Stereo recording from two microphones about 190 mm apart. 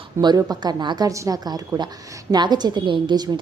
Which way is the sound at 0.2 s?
20° right (ahead or behind).